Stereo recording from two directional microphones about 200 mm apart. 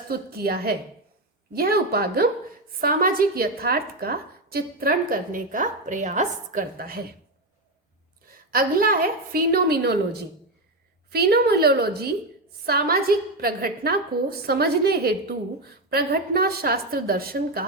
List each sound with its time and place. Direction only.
0.1 s a woman's voice: 50° right (ahead or behind)
8.4 s a woman's voice: 45° right (ahead or behind)